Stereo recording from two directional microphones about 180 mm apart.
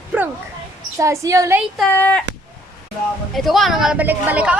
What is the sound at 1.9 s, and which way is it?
Speech, 10° left (ahead or behind).